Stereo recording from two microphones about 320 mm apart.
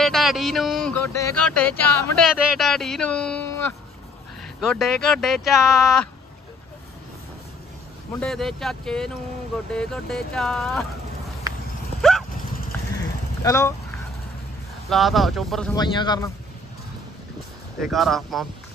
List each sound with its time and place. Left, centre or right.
0.0 s speech: centre
8.2 s speech: centre
12.0 s vehicle: centre
14.9 s speech: centre
15.7 s a man's voice: centre
17.7 s speech: centre